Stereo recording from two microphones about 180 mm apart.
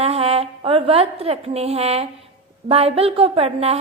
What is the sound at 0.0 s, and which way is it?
A woman's voice, 35° right (ahead or behind).